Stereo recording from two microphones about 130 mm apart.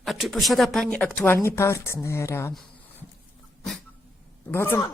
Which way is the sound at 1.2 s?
20° left (ahead or behind).